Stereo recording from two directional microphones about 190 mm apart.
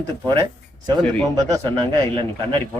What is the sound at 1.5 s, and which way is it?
Speech, 20° right (ahead or behind).